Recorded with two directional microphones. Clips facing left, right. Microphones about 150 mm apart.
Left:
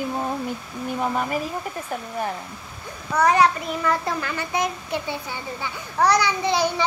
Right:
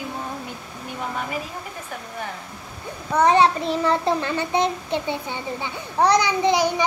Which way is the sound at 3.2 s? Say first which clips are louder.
Right 1 dB; 25° right (ahead or behind).